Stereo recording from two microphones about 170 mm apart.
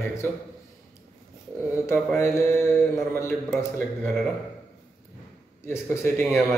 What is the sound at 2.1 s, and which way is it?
Speech, 15° left (ahead or behind).